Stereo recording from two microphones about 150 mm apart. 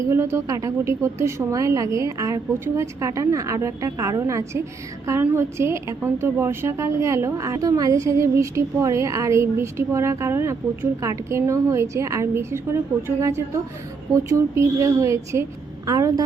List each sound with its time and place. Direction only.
0.0 s a woman's voice: 20° right (ahead or behind)